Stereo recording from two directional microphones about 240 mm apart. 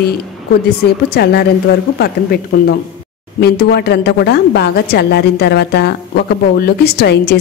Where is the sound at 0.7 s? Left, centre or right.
Left.